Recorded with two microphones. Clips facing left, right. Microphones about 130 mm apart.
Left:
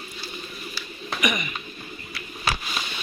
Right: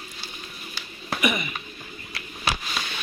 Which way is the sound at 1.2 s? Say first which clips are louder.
Right 1 dB; 30° right (ahead or behind).